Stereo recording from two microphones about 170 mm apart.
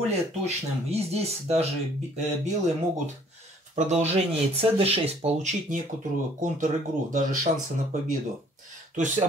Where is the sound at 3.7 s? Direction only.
40° right (ahead or behind).